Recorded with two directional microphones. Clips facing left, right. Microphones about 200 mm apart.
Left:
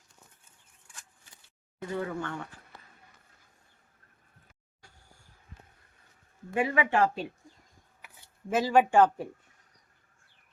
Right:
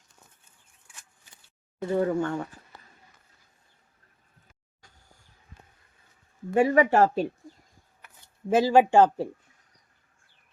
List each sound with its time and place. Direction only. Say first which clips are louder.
1.9 s speech: right 9 dB; 40° right (ahead or behind)
6.5 s speech: right 7 dB; 40° right (ahead or behind)
8.4 s speech: right 4 dB; 30° right (ahead or behind)